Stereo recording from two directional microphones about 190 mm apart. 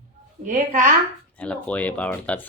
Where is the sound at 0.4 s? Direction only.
40° right (ahead or behind).